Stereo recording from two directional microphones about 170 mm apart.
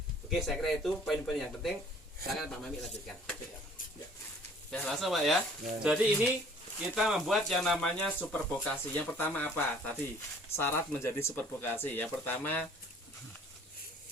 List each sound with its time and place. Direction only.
0.3 s speech: centre (ahead or behind)
4.7 s speech: 5° left (ahead or behind)